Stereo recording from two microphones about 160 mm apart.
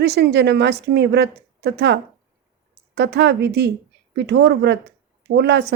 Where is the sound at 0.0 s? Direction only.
90° right.